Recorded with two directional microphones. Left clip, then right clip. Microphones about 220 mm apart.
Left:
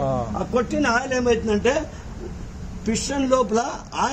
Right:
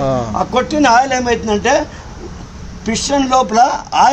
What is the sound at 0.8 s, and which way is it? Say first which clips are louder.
A woman's voice: right 12 dB; 25° right (ahead or behind).